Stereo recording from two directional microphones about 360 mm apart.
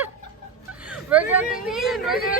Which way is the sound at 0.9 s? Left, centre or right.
Centre.